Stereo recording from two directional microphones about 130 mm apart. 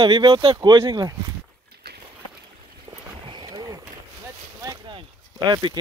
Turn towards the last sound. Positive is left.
turn(degrees=-35)  # may be behind; listen again after turning